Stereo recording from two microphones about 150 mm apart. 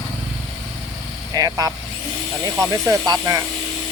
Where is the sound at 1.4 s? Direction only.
25° right (ahead or behind).